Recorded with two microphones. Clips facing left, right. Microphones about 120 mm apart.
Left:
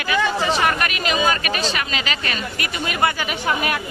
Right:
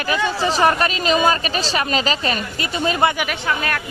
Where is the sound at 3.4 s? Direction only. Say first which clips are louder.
Left 2 dB; 15° left (ahead or behind).